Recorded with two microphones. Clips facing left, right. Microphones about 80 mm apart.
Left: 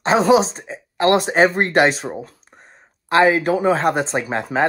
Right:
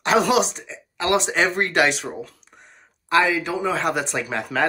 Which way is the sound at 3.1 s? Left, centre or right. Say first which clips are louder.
Left 5 dB; left.